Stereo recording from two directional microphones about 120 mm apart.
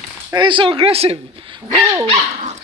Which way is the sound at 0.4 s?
45° right (ahead or behind).